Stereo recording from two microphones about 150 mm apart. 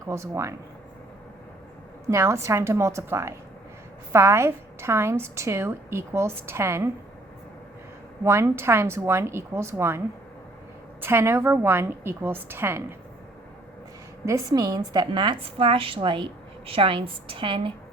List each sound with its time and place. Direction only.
0.0 s a woman's voice: 20° right (ahead or behind)
2.0 s a woman's voice: 20° right (ahead or behind)
8.2 s a woman's voice: 20° right (ahead or behind)
11.0 s a woman's voice: 15° right (ahead or behind)
14.3 s a woman's voice: 20° right (ahead or behind)